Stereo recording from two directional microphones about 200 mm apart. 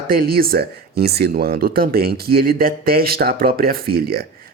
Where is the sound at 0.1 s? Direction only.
50° right (ahead or behind).